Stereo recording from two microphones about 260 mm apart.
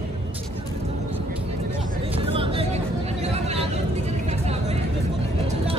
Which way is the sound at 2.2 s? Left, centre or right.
Right.